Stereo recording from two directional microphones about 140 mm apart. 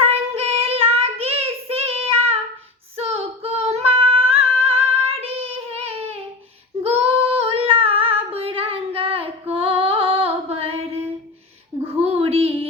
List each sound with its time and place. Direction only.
0.0 s child singing: 45° right (ahead or behind)
2.9 s singing: 45° right (ahead or behind)
6.8 s female singing: 45° right (ahead or behind)
12.0 s a sound: 45° right (ahead or behind)